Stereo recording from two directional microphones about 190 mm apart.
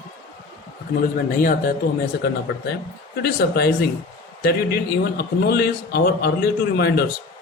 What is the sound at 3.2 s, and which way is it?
Speech, 55° left (ahead or behind).